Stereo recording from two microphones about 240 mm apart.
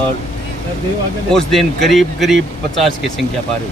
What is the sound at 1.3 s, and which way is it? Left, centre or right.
Speech, centre.